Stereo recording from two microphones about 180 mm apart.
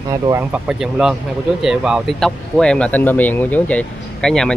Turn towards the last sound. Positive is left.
turn(degrees=5)  # may be behind; listen again after turning